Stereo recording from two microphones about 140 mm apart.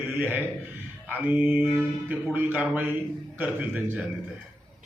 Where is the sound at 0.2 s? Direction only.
15° right (ahead or behind).